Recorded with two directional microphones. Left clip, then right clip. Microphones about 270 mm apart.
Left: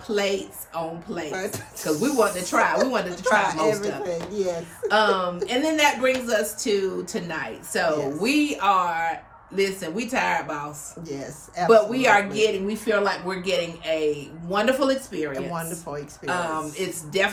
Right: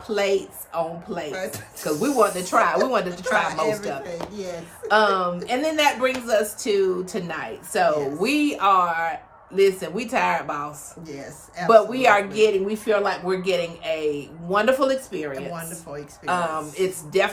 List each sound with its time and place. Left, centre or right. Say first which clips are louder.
0.1 s speech: right 2 dB; centre
1.3 s speech: even; centre
1.8 s speech: right 2 dB; centre
3.3 s speech: left 1 dB; centre
4.9 s speech: right 2 dB; centre
11.1 s speech: left 3 dB; centre
11.7 s speech: right 2 dB; centre
15.3 s speech: left 2 dB; centre
16.2 s speech: right 2 dB; centre